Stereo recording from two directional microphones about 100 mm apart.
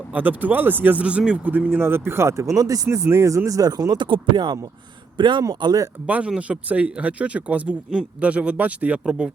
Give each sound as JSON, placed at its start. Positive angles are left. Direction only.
{"t": 0.1, "sound": "speech", "side_deg": -15}
{"t": 6.1, "sound": "speech", "side_deg": -10}